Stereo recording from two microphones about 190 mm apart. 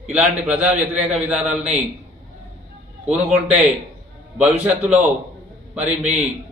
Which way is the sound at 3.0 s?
5° right (ahead or behind).